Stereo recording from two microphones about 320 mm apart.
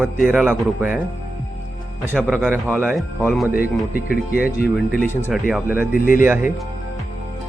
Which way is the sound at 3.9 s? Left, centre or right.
Left.